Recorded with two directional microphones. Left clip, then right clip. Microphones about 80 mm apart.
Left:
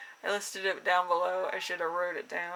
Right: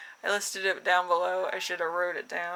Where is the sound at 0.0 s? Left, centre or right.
Right.